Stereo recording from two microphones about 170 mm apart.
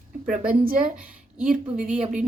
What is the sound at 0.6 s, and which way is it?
Speech, 55° right (ahead or behind).